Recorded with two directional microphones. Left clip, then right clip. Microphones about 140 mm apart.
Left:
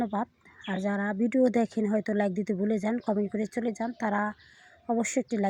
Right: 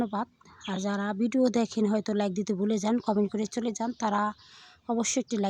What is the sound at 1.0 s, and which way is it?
Speech, 25° right (ahead or behind).